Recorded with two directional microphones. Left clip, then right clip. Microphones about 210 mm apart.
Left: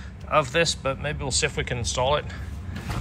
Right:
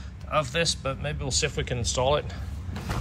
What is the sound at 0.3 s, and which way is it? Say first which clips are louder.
Speech: left 4 dB; 10° right (ahead or behind).